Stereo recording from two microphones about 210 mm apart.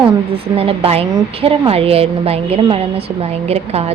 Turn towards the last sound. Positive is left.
turn(degrees=-30)  # may be behind; listen again after turning